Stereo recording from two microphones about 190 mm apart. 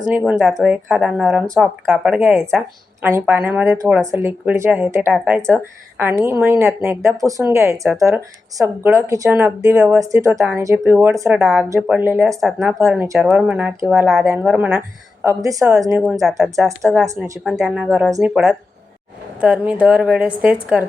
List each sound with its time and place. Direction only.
0.1 s speech: 5° right (ahead or behind)
12.4 s speech: centre (ahead or behind); by 16.0 s 15° right (ahead or behind)
16.2 s speech: centre (ahead or behind)
16.6 s speech: 15° right (ahead or behind)
17.4 s speech: 5° right (ahead or behind)